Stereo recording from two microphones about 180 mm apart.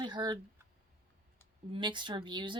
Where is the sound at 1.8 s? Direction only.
25° right (ahead or behind).